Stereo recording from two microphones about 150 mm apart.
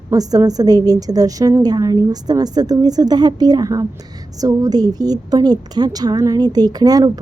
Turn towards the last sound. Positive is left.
turn(degrees=-25)  # may be behind; listen again after turning